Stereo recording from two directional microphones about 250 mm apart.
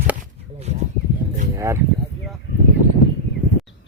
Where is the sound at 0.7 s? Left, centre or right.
Right.